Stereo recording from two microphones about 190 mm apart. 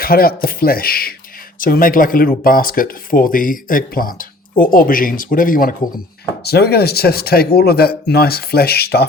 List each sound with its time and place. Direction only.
0.0 s speech: 50° left (ahead or behind)
6.4 s speech: 60° left (ahead or behind)